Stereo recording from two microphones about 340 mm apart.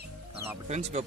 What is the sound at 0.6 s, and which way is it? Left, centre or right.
Speech, centre.